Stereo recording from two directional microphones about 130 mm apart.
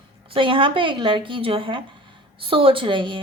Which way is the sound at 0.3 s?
40° right (ahead or behind).